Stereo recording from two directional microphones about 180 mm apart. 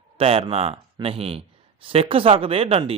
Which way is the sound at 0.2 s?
30° right (ahead or behind).